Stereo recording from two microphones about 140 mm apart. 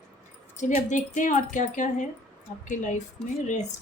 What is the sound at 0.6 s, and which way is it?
Speech, 60° left (ahead or behind).